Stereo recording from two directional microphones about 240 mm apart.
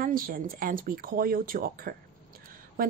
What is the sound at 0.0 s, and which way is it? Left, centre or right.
A woman's voice, right.